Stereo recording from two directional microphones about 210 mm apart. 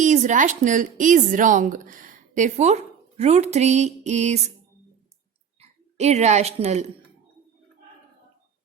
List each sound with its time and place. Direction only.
0.0 s a woman's voice: 35° right (ahead or behind)
5.5 s speech: 30° right (ahead or behind)